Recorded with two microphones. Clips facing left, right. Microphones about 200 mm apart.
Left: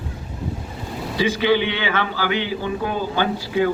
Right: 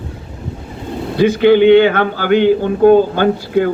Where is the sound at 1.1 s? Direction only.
55° right (ahead or behind).